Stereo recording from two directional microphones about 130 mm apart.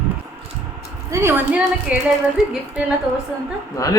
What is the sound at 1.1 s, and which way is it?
Speech, 20° right (ahead or behind).